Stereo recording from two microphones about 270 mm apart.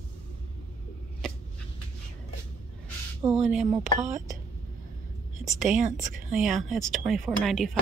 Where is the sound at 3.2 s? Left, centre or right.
Centre.